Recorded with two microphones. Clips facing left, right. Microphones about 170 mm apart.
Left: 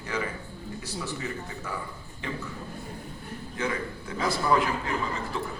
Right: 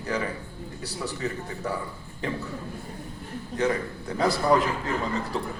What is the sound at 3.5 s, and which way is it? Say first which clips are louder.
A man's voice: right 5 dB; 40° right (ahead or behind).